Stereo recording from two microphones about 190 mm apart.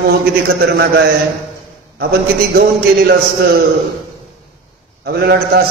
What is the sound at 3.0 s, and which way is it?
Speech, 60° right (ahead or behind).